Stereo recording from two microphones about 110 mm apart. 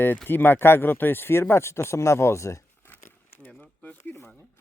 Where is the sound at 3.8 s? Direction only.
15° left (ahead or behind).